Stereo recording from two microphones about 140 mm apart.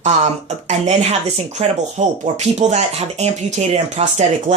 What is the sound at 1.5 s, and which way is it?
Speech, 55° right (ahead or behind).